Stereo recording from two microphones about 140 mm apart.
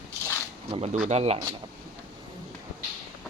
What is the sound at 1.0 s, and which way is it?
Speech, 50° right (ahead or behind).